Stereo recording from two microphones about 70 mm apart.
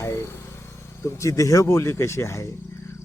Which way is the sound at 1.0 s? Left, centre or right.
Left.